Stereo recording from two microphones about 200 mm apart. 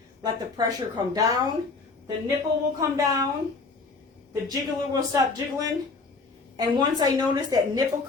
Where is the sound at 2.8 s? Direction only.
15° right (ahead or behind).